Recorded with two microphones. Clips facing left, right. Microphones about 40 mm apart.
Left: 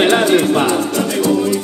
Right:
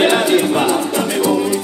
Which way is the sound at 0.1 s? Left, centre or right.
Centre.